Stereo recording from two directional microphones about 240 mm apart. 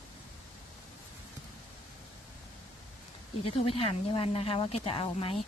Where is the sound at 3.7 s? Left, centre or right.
Left.